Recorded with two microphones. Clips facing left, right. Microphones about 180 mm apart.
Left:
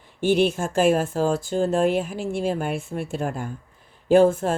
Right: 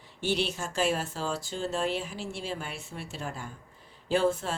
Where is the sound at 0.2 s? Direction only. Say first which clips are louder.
Left 10 dB; 50° left (ahead or behind).